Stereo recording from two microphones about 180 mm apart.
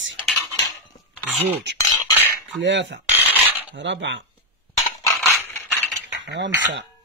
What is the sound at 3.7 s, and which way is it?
Cutlery, 85° right.